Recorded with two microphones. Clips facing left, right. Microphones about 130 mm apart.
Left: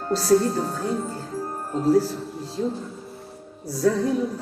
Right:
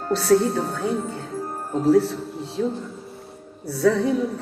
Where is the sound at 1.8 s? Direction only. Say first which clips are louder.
Right 2 dB; 70° right (ahead or behind).